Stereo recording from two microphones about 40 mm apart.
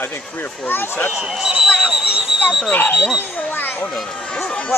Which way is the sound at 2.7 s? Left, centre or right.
Left.